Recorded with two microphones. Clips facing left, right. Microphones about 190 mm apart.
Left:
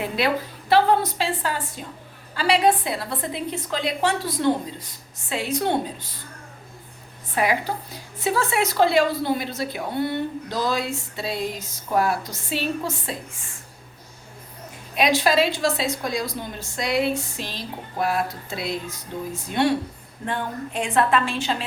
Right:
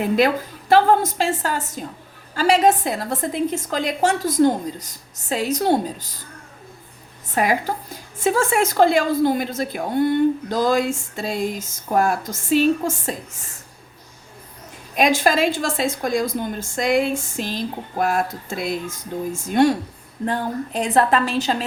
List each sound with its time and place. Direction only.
0.7 s a woman's voice: 45° right (ahead or behind)
7.3 s a woman's voice: 45° right (ahead or behind)
14.9 s a woman's voice: 50° right (ahead or behind)